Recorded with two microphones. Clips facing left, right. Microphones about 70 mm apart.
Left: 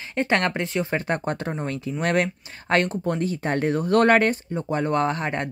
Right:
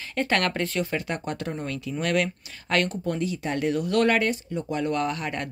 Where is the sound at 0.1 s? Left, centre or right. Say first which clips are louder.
Left 2 dB; left.